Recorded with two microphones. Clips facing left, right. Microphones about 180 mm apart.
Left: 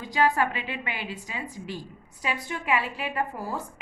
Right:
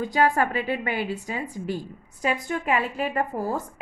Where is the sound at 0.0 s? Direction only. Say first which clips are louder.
Right 2 dB; 45° right (ahead or behind).